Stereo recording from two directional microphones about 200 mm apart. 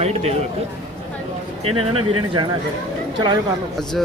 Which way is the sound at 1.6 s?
30° right (ahead or behind).